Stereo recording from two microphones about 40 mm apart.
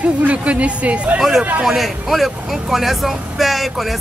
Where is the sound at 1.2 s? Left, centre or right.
Centre.